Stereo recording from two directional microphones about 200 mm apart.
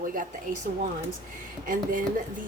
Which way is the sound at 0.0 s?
45° right (ahead or behind).